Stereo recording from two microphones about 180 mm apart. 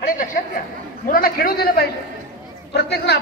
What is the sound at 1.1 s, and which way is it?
A man's voice, 55° left (ahead or behind).